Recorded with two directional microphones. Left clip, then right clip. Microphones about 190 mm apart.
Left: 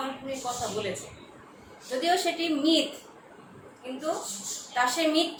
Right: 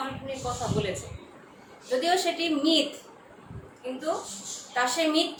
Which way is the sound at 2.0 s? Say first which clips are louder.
Even; 15° right (ahead or behind).